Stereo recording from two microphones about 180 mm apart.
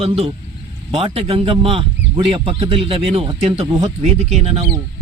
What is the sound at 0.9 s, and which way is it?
A man's voice, 35° right (ahead or behind).